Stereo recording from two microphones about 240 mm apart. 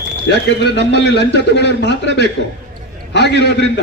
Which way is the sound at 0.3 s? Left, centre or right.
Left.